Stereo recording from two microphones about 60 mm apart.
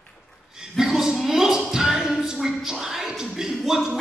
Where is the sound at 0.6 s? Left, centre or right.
Centre.